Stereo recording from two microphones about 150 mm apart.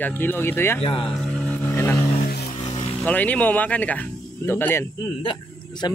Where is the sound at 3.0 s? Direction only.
10° left (ahead or behind).